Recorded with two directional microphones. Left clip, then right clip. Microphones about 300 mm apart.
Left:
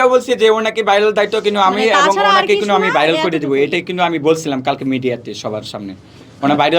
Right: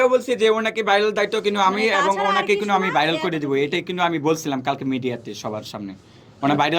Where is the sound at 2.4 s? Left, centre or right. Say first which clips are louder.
Left 6 dB; centre.